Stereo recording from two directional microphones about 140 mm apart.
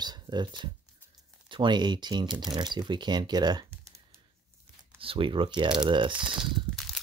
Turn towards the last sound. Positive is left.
turn(degrees=0)  # may be behind; listen again after turning